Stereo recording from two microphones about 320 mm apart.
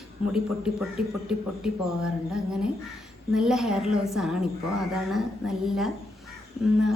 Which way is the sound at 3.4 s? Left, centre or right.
Centre.